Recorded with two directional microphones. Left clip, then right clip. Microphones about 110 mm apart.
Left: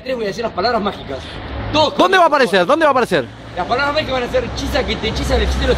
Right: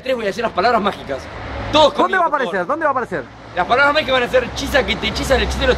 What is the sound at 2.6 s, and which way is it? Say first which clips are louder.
Speech: left 5 dB; 25° left (ahead or behind).